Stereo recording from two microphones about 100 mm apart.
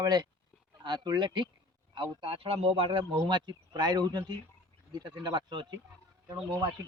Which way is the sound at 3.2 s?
50° right (ahead or behind).